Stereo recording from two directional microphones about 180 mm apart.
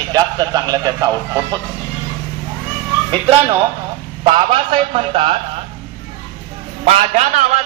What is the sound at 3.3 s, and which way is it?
A man's voice, 30° right (ahead or behind).